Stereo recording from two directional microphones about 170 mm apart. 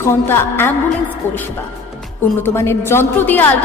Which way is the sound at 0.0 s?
15° left (ahead or behind).